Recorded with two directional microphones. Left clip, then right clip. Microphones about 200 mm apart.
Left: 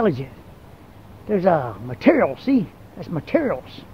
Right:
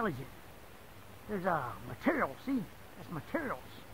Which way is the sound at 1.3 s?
15° left (ahead or behind).